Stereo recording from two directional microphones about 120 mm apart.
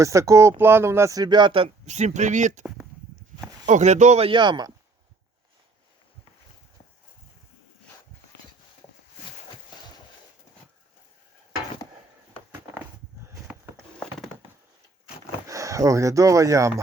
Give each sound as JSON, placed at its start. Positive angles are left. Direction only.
{"t": 0.0, "sound": "speech", "side_deg": -25}
{"t": 1.9, "sound": "speech", "side_deg": -75}
{"t": 3.7, "sound": "speech", "side_deg": -80}
{"t": 4.3, "sound": "speech", "side_deg": -40}
{"t": 9.7, "sound": "a sound", "side_deg": 40}
{"t": 15.4, "sound": "speech", "side_deg": -25}